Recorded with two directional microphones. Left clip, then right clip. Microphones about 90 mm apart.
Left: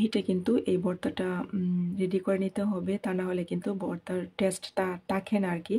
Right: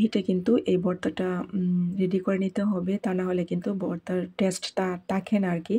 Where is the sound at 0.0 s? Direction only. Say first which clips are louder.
Right 3 dB; 20° right (ahead or behind).